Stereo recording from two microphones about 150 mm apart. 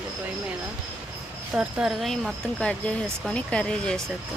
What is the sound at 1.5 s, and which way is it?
Speech, 5° right (ahead or behind).